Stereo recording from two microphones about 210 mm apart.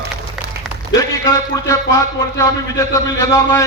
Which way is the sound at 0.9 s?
15° left (ahead or behind).